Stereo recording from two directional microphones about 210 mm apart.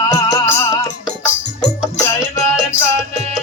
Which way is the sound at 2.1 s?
15° left (ahead or behind).